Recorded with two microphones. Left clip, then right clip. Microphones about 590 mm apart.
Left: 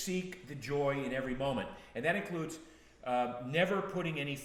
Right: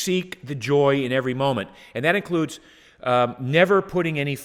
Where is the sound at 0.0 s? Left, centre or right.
Right.